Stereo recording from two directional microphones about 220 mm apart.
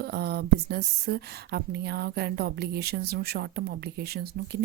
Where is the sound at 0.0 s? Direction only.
50° right (ahead or behind).